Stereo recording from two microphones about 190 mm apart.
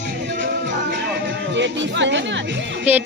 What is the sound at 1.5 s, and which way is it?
Music, 70° right (ahead or behind).